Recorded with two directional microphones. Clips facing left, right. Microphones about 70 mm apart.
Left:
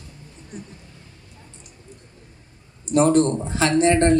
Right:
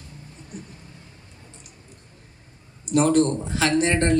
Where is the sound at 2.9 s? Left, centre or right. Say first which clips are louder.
Left 2 dB; left.